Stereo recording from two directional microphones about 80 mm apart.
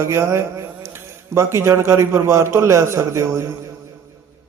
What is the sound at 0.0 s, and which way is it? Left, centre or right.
A man's voice, right.